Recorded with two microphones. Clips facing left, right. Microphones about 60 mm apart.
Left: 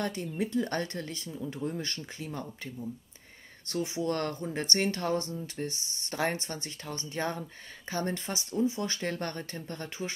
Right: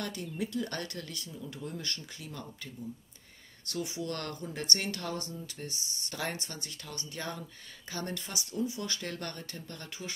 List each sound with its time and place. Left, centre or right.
0.0 s speech: left
3.6 s speech: left